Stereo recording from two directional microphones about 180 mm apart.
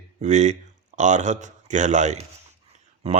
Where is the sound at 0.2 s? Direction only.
40° right (ahead or behind).